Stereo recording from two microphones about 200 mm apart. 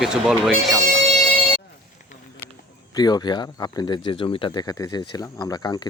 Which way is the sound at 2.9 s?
20° left (ahead or behind).